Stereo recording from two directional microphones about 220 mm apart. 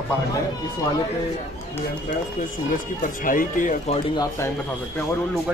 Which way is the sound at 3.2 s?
40° left (ahead or behind).